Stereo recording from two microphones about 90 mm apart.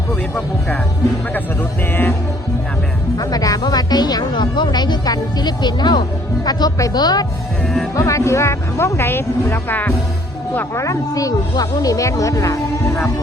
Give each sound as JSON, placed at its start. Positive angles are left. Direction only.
{"t": 1.9, "sound": "music", "side_deg": 25}
{"t": 3.2, "sound": "speech", "side_deg": 45}
{"t": 7.9, "sound": "speech", "side_deg": 35}
{"t": 10.8, "sound": "speech", "side_deg": 40}